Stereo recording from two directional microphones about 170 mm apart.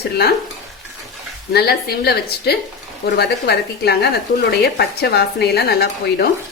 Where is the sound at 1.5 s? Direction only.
70° left (ahead or behind).